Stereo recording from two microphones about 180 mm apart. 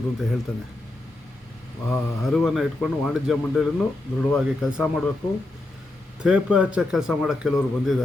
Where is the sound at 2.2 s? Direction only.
Centre (ahead or behind).